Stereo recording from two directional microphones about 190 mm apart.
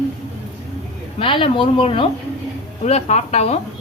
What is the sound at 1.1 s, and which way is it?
Speech, 25° left (ahead or behind).